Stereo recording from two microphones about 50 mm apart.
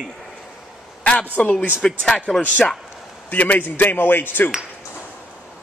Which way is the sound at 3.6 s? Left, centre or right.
Left.